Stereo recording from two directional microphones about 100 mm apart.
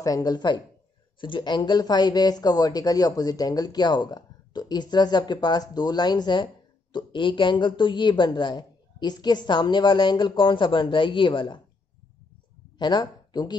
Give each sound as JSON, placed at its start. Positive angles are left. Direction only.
{"t": 0.0, "sound": "speech", "side_deg": 40}
{"t": 12.7, "sound": "speech", "side_deg": 45}